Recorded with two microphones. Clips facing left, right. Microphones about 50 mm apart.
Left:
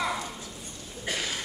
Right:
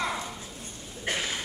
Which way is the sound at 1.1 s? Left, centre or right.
Right.